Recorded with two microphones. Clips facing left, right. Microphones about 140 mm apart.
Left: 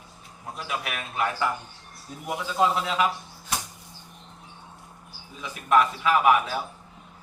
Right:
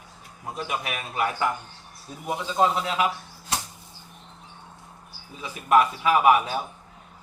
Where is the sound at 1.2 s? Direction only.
15° right (ahead or behind).